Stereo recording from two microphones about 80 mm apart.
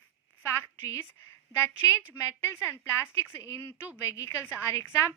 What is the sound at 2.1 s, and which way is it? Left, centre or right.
A woman's voice, left.